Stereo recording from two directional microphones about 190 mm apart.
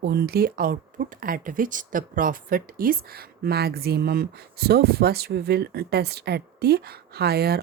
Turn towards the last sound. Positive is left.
turn(degrees=-55)  # may be behind; listen again after turning